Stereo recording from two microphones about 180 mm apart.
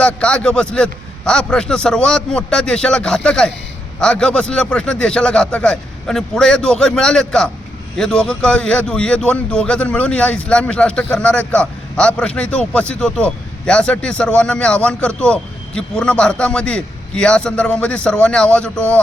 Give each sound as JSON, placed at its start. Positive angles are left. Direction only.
{"t": 0.0, "sound": "a man's voice", "side_deg": 5}